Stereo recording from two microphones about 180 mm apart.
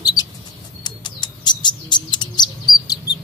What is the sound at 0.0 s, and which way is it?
Bird, 20° left (ahead or behind).